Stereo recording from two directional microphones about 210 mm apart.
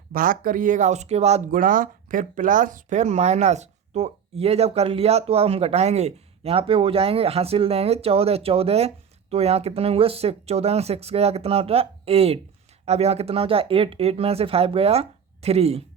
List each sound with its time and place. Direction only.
0.1 s speech: 40° right (ahead or behind)